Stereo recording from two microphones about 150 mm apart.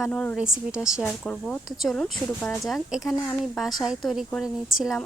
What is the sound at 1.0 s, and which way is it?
Speech, 5° left (ahead or behind).